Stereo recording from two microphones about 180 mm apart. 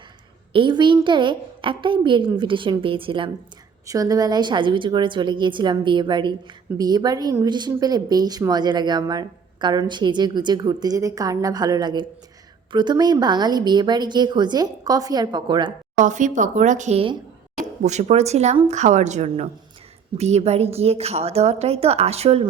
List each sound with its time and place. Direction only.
0.5 s speech: 25° right (ahead or behind)
16.0 s a woman's voice: 45° right (ahead or behind)